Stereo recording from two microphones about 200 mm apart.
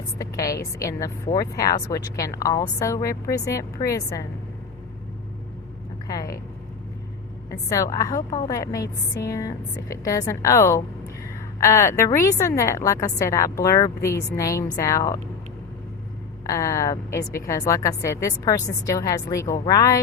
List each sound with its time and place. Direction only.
0.2 s a woman's voice: 15° left (ahead or behind)
6.1 s vehicle: 20° left (ahead or behind)
7.5 s a woman's voice: 15° left (ahead or behind)
16.5 s a woman's voice: 15° left (ahead or behind)